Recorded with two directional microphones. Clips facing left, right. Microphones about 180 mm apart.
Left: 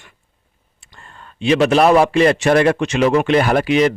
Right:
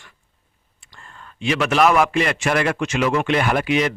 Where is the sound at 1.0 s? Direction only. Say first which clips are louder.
Left 5 dB; 35° left (ahead or behind).